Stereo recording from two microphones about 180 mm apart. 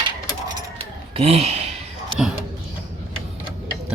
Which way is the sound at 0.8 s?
35° right (ahead or behind).